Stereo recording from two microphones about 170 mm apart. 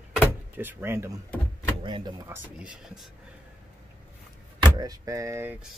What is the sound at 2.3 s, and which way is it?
Speech, 5° right (ahead or behind).